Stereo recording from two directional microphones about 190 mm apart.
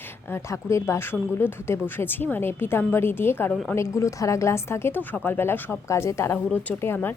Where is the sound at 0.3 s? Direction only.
15° left (ahead or behind).